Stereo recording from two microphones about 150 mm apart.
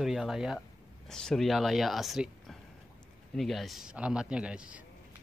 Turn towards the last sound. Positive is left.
turn(degrees=-5)  # may be behind; listen again after turning